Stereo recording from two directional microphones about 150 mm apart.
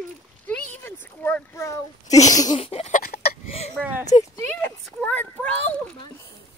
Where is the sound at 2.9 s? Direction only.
90° left.